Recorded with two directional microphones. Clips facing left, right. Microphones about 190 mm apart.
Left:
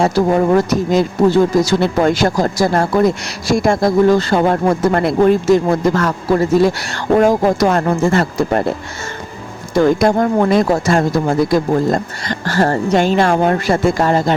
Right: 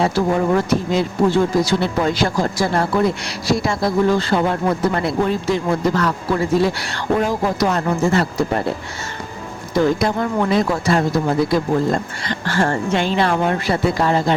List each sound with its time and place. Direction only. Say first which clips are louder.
0.0 s speech: left 4 dB; 40° left (ahead or behind)
9.8 s speech: left 6 dB; 50° left (ahead or behind)